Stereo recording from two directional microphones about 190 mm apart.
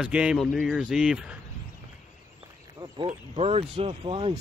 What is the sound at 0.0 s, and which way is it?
Speech, 5° right (ahead or behind).